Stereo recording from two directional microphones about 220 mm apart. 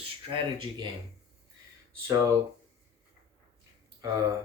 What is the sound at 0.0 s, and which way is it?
Speech, 20° right (ahead or behind).